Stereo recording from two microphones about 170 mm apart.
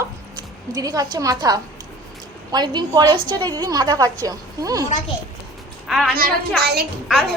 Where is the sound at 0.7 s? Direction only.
20° right (ahead or behind).